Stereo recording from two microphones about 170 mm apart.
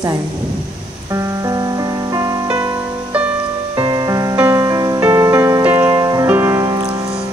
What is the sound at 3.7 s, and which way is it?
Music, 25° right (ahead or behind).